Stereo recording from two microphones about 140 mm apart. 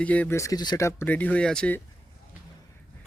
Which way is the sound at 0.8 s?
15° left (ahead or behind).